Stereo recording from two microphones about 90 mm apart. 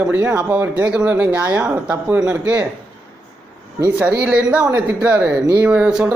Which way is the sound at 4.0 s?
15° right (ahead or behind).